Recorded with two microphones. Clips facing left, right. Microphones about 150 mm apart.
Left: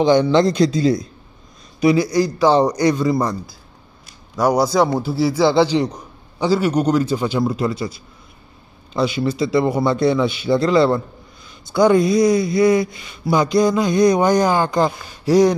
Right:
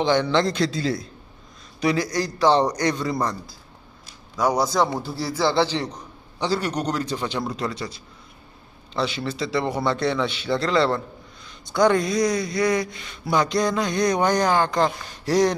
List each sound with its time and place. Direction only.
0.0 s a man's voice: 15° left (ahead or behind)
4.4 s speech: 10° left (ahead or behind)